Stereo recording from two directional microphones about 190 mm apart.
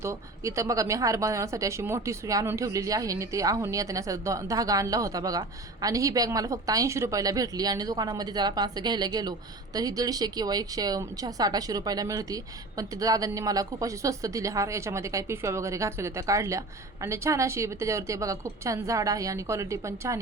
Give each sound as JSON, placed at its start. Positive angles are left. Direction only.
{"t": 0.0, "sound": "a woman's voice", "side_deg": -15}